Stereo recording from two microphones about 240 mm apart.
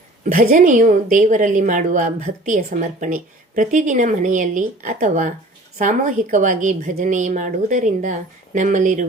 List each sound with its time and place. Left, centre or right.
0.3 s a woman's voice: right